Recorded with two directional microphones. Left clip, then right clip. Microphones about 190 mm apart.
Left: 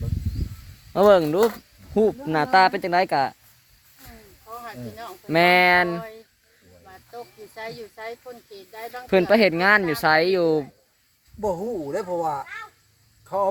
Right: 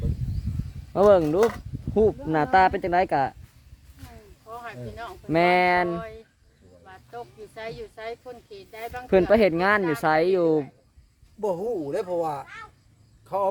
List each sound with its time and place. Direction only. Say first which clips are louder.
0.9 s speech: left 2 dB; 5° right (ahead or behind)
4.6 s speech: even; centre (ahead or behind)
7.5 s speech: left 1 dB; centre (ahead or behind)
9.0 s speech: left 1 dB; 20° right (ahead or behind)